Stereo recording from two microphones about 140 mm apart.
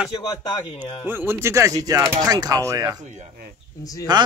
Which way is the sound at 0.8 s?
40° left (ahead or behind).